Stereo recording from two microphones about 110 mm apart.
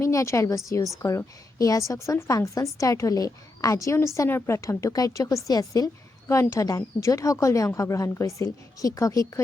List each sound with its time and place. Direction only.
0.0 s a woman's voice: 30° left (ahead or behind)